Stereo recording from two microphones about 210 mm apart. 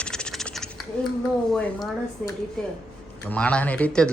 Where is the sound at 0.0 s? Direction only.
5° left (ahead or behind).